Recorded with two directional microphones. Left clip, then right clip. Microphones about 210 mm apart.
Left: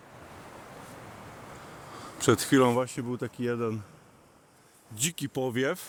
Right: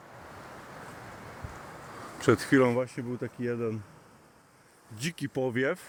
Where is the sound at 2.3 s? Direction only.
20° left (ahead or behind).